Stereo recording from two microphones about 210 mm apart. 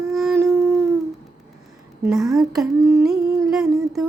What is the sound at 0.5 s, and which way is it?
Female singing, 10° right (ahead or behind).